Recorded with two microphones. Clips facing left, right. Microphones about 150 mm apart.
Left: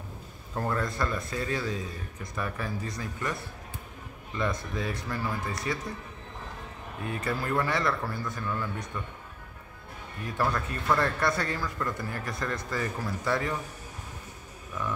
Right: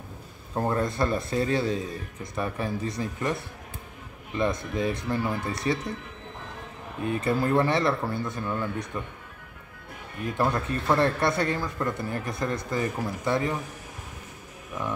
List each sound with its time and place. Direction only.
0.6 s speech: 25° right (ahead or behind)
7.1 s speech: 25° right (ahead or behind)
10.2 s speech: 20° right (ahead or behind)
14.7 s speech: 20° right (ahead or behind)